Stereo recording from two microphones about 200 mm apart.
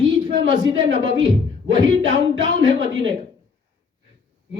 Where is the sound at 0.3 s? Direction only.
65° right (ahead or behind).